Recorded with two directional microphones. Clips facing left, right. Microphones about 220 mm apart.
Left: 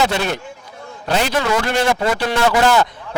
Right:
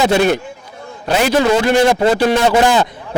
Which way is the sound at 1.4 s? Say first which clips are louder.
Right 6 dB; 25° right (ahead or behind).